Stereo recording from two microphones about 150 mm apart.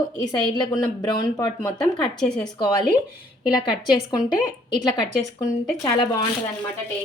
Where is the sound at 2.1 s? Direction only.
5° left (ahead or behind).